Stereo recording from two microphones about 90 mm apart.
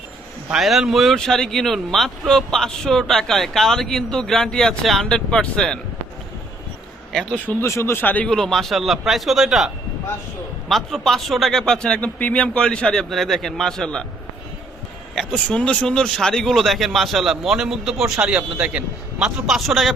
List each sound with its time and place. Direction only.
0.5 s speech: 5° right (ahead or behind)
7.1 s speech: 5° left (ahead or behind)
7.6 s speech: 30° left (ahead or behind)
8.3 s speech: 5° left (ahead or behind)
15.1 s speech: 5° left (ahead or behind); by 19.3 s 15° right (ahead or behind)
19.5 s speech: centre (ahead or behind)